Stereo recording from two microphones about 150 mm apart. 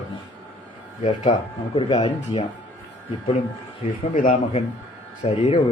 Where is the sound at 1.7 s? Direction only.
35° left (ahead or behind).